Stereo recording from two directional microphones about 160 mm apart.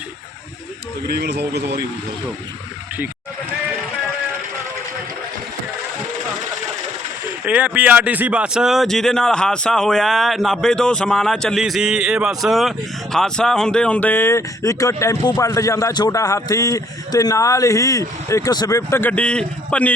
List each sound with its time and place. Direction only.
1.1 s speech: 90° right
7.4 s speech: 10° right (ahead or behind); by 19.9 s 5° left (ahead or behind)